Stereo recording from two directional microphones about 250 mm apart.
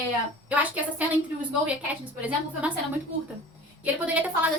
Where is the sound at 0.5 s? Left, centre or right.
Centre.